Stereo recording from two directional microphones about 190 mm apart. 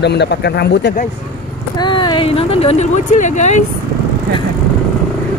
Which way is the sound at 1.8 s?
25° left (ahead or behind).